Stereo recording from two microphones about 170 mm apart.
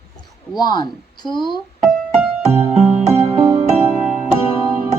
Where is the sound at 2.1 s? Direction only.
5° right (ahead or behind).